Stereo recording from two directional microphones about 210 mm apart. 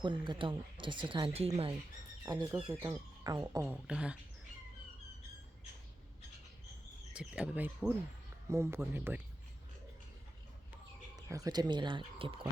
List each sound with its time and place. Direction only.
0.0 s speech: 25° right (ahead or behind)
3.7 s speech: 5° right (ahead or behind)
7.1 s speech: 5° right (ahead or behind)
11.3 s speech: 15° right (ahead or behind)